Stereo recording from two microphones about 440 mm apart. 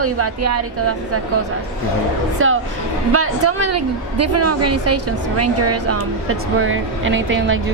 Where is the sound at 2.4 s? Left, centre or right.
Right.